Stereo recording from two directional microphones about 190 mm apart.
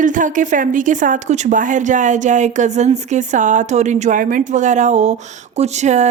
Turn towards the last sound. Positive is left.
turn(degrees=-40)  # may be behind; listen again after turning